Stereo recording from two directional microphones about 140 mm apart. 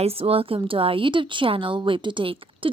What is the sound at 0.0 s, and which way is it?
Speech, 45° right (ahead or behind).